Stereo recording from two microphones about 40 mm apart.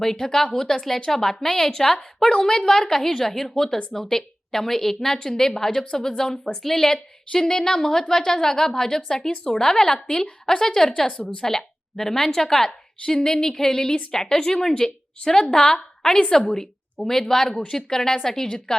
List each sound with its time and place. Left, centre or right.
0.0 s a woman's voice: centre
11.1 s a woman's voice: left
11.4 s a woman's voice: centre